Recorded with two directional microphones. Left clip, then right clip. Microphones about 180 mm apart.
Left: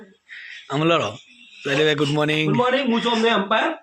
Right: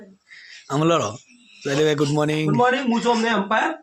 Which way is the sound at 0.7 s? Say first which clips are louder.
Even; 25° right (ahead or behind).